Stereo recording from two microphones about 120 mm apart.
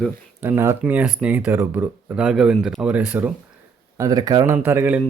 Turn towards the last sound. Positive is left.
turn(degrees=-15)  # may be behind; listen again after turning